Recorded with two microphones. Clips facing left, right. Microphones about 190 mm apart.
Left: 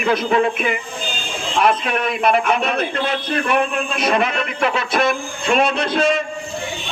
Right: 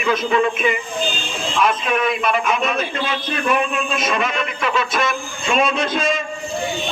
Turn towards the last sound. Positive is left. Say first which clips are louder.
# left 2 dB
turn(degrees=65)  # may be behind; listen again after turning